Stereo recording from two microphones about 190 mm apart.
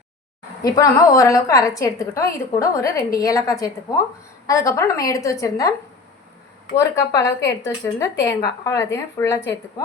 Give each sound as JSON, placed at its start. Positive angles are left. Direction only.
{"t": 0.6, "sound": "a woman's voice", "side_deg": 20}
{"t": 6.7, "sound": "a woman's voice", "side_deg": 15}